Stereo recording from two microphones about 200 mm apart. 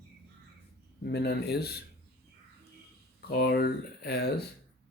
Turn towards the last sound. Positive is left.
turn(degrees=55)  # may be behind; listen again after turning